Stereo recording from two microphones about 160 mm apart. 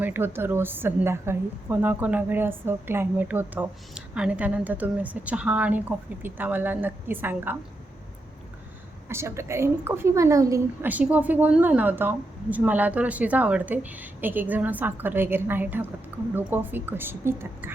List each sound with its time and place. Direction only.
0.0 s a woman's voice: 15° right (ahead or behind)
9.0 s a woman's voice: 15° right (ahead or behind)
10.8 s a woman's voice: 10° right (ahead or behind)